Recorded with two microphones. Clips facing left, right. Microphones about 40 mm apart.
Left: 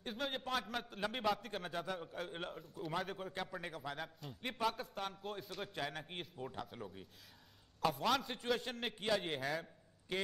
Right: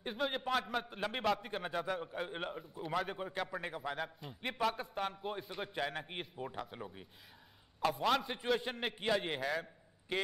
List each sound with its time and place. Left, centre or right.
0.0 s a man's voice: centre